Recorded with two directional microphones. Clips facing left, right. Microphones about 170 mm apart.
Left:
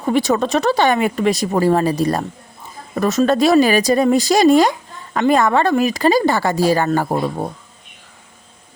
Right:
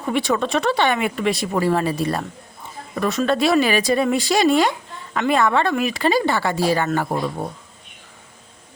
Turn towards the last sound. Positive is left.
turn(degrees=40)  # may be behind; listen again after turning